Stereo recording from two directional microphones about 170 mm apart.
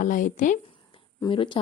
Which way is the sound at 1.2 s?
30° left (ahead or behind).